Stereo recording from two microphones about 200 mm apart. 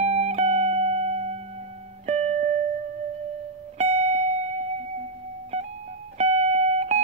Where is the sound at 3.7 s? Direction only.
35° right (ahead or behind).